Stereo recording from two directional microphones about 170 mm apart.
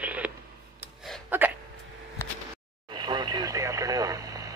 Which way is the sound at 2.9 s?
25° right (ahead or behind).